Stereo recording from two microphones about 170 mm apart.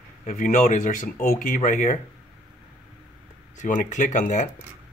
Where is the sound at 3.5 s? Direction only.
45° left (ahead or behind).